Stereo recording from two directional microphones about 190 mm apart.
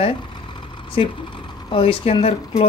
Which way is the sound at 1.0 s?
30° left (ahead or behind).